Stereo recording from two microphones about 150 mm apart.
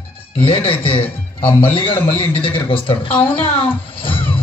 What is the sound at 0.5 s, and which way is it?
Speech, 35° left (ahead or behind).